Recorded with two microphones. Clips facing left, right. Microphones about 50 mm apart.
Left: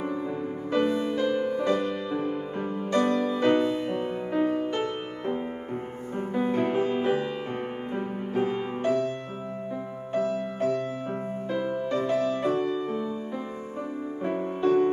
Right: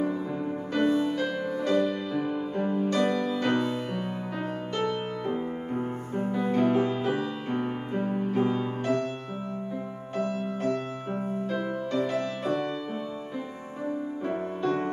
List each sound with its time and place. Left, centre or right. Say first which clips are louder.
0.4 s music: left 2 dB; centre
10.1 s music: left 3 dB; centre
14.2 s music: left 5 dB; centre